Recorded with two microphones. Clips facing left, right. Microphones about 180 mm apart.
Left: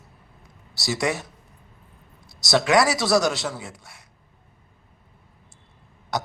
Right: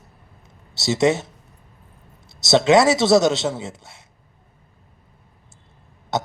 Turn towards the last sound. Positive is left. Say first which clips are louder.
# right 4 dB
turn(degrees=-25)  # may be behind; listen again after turning